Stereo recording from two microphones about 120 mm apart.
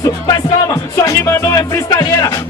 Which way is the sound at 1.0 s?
25° left (ahead or behind).